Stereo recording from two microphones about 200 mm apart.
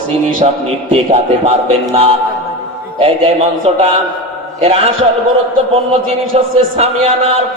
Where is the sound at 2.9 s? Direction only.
30° right (ahead or behind).